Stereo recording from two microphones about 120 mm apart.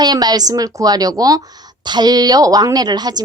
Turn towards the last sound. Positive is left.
turn(degrees=-35)  # may be behind; listen again after turning